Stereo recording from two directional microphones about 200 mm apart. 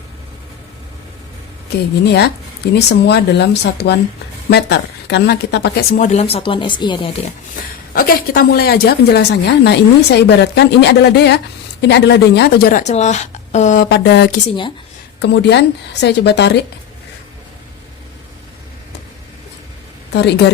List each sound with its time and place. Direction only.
2.0 s a woman's voice: 55° left (ahead or behind)
6.0 s speech: 35° left (ahead or behind)
7.9 s a woman's voice: 45° left (ahead or behind)
13.9 s a woman's voice: 55° left (ahead or behind)
20.1 s a woman's voice: 55° left (ahead or behind)